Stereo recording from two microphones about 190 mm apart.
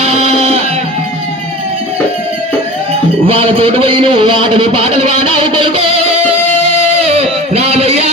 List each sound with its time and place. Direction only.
0.0 s music: 35° right (ahead or behind)
3.2 s speech: 30° right (ahead or behind)
5.4 s music: 25° right (ahead or behind)